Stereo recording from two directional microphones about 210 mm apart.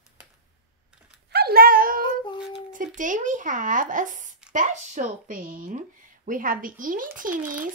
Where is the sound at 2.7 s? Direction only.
40° right (ahead or behind).